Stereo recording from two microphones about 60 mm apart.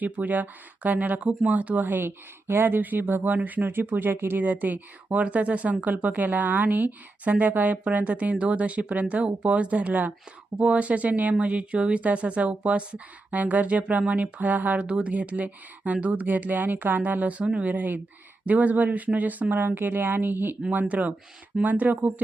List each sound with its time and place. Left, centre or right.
0.0 s speech: right
20.6 s speech: right